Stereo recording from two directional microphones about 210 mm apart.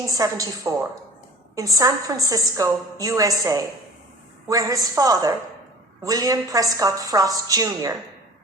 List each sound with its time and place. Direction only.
0.1 s a woman's voice: 15° right (ahead or behind)